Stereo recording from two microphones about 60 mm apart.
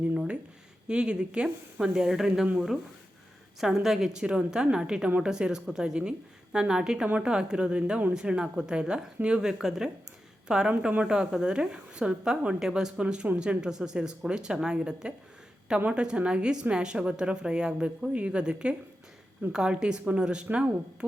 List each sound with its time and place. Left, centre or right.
0.1 s a sound: right
0.9 s speech: centre
3.6 s speech: centre